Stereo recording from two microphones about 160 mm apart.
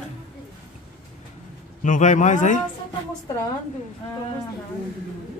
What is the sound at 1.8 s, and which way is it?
Speech, 50° left (ahead or behind).